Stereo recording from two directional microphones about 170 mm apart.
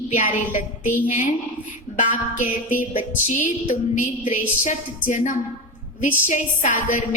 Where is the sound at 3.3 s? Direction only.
45° left (ahead or behind).